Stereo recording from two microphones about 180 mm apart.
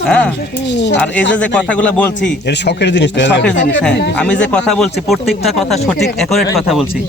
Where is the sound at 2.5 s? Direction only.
70° left (ahead or behind).